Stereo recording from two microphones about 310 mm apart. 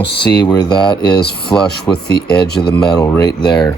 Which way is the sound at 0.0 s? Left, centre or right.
Left.